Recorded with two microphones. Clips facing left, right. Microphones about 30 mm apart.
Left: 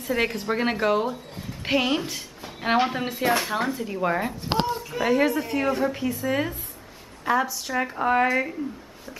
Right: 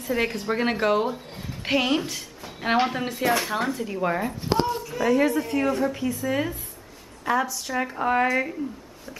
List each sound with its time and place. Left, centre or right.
0.0 s a woman's voice: centre
4.8 s a woman's voice: centre